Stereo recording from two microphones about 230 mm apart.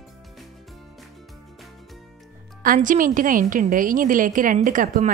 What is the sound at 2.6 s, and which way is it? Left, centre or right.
A woman's voice, right.